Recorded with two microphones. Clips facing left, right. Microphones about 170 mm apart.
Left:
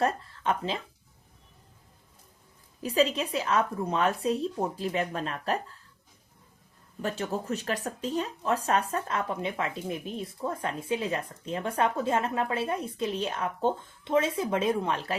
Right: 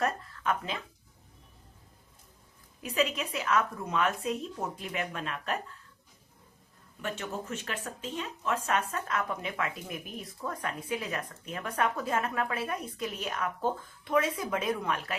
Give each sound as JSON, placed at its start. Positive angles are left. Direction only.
{"t": 0.0, "sound": "speech", "side_deg": 30}
{"t": 2.8, "sound": "a woman's voice", "side_deg": 35}
{"t": 7.0, "sound": "speech", "side_deg": 35}